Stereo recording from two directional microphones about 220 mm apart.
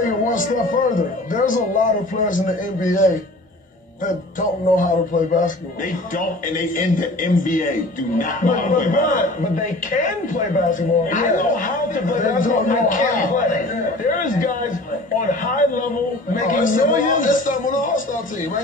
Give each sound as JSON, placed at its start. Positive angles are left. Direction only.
{"t": 0.0, "sound": "a man's voice", "side_deg": 35}
{"t": 4.7, "sound": "a man's voice", "side_deg": 35}